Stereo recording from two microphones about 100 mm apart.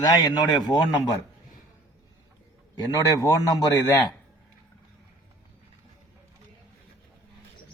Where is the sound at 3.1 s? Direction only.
35° left (ahead or behind).